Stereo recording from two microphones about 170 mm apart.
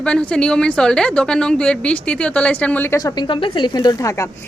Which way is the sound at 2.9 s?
25° left (ahead or behind).